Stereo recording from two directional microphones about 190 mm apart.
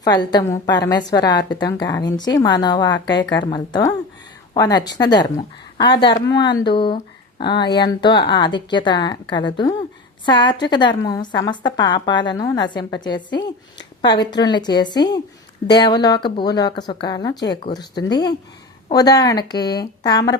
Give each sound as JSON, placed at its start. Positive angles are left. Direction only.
{"t": 0.0, "sound": "a woman's voice", "side_deg": 20}